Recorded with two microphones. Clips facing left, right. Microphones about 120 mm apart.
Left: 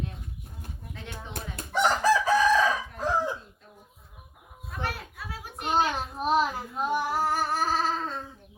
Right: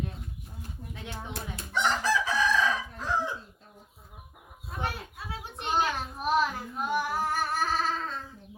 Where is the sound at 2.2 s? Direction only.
55° left (ahead or behind).